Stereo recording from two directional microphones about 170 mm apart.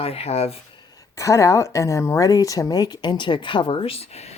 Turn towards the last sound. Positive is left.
turn(degrees=40)  # may be behind; listen again after turning